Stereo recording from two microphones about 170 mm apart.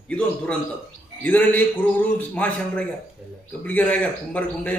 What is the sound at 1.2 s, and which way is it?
A man's voice, 10° left (ahead or behind).